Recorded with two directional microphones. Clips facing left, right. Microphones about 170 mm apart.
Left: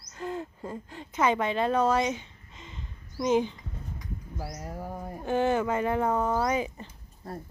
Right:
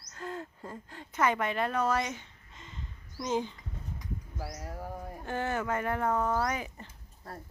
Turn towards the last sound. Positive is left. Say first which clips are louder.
# left 5 dB
turn(degrees=20)  # may be behind; listen again after turning